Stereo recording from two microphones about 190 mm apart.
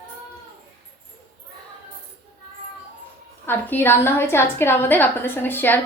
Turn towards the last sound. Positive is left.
turn(degrees=10)  # may be behind; listen again after turning